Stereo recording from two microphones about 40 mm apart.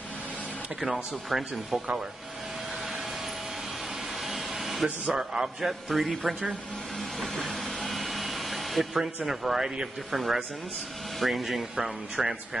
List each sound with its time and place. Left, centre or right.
0.7 s speech: centre
4.2 s vehicle: centre
4.8 s speech: right
5.6 s speech: centre
7.2 s a sound: centre
8.9 s speech: centre